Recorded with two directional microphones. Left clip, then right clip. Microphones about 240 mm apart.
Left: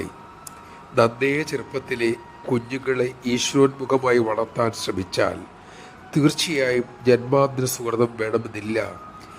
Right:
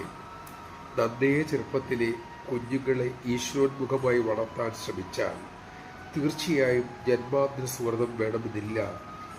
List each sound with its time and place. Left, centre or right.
0.9 s a man's voice: left